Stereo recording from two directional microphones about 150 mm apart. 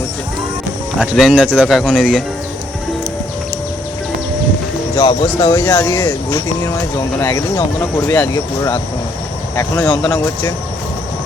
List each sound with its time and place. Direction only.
0.9 s speech: centre (ahead or behind)
4.9 s speech: 30° left (ahead or behind)